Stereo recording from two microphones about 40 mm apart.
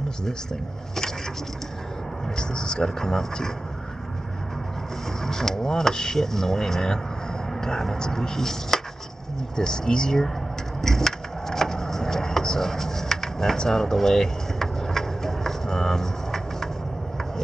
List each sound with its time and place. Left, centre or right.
2.3 s speech: centre
5.2 s speech: centre
10.8 s a sound: centre